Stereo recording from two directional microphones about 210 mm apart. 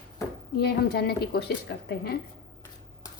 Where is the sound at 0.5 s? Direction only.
50° left (ahead or behind).